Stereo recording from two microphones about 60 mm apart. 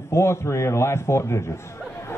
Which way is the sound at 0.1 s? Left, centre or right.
Left.